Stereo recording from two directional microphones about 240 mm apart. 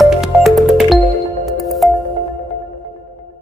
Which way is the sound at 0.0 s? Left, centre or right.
Centre.